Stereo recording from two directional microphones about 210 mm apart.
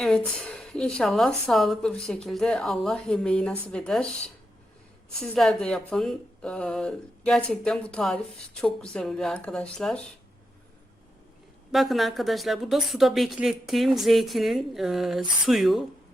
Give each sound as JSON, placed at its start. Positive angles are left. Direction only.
{"t": 0.3, "sound": "a woman's voice", "side_deg": 5}
{"t": 5.2, "sound": "a woman's voice", "side_deg": 0}
{"t": 11.7, "sound": "a woman's voice", "side_deg": 0}